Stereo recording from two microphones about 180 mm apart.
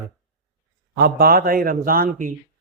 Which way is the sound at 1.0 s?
55° right (ahead or behind).